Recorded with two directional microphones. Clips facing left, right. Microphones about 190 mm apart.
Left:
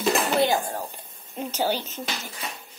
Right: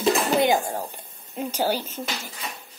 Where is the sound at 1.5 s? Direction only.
10° right (ahead or behind).